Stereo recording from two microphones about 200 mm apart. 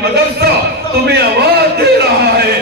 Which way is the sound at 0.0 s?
55° right (ahead or behind).